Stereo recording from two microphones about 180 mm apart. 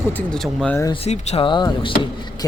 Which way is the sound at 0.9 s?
35° left (ahead or behind).